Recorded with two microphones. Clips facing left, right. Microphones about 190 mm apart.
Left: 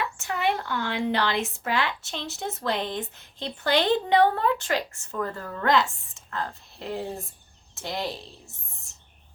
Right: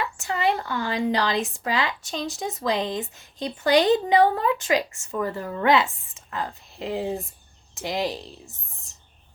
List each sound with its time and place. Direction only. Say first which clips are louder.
0.2 s a woman's voice: right 3 dB; 5° right (ahead or behind)
2.0 s speech: right 4 dB; 15° right (ahead or behind)